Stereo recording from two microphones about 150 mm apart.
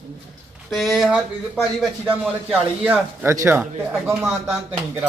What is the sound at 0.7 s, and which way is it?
A man's voice, centre (ahead or behind).